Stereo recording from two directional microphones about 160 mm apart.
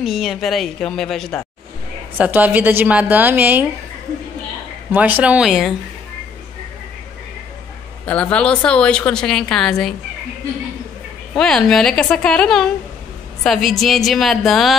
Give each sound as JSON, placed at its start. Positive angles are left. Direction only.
{"t": 0.0, "sound": "a woman's voice", "side_deg": 0}
{"t": 2.1, "sound": "a woman's voice", "side_deg": -10}
{"t": 4.9, "sound": "a woman's voice", "side_deg": -10}
{"t": 8.0, "sound": "a woman's voice", "side_deg": 10}
{"t": 11.3, "sound": "a woman's voice", "side_deg": 5}